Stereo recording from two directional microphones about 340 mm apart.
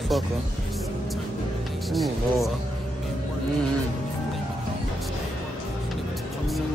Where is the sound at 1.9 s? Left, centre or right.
Centre.